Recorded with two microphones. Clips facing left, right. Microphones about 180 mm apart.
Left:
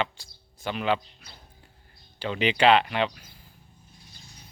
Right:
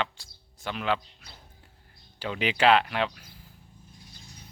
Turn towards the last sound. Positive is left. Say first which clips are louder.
# left 2 dB
turn(degrees=0)  # may be behind; listen again after turning